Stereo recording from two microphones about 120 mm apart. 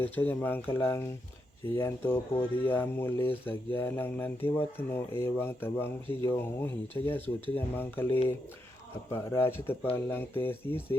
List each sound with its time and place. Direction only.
0.0 s a man's voice: 15° left (ahead or behind)